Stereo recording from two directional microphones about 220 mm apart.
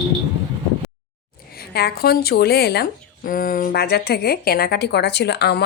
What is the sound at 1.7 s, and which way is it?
Speech, 45° left (ahead or behind).